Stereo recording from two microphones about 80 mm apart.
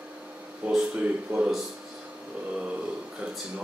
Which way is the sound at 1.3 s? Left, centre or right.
Right.